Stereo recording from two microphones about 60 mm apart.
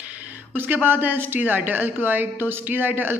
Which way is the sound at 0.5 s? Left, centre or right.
Right.